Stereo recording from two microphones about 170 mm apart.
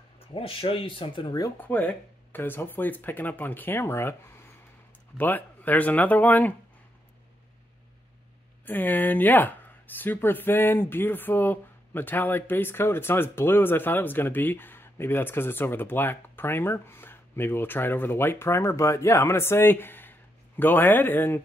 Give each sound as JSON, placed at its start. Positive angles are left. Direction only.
{"t": 0.3, "sound": "speech", "side_deg": 30}
{"t": 1.6, "sound": "speech", "side_deg": 10}
{"t": 8.6, "sound": "speech", "side_deg": 10}